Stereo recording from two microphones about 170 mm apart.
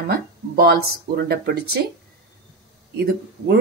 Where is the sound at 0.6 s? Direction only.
65° right (ahead or behind).